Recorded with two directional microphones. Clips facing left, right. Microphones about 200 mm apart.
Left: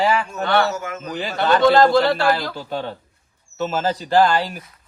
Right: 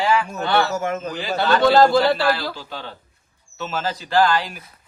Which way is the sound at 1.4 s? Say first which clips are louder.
Left 1 dB; 5° right (ahead or behind).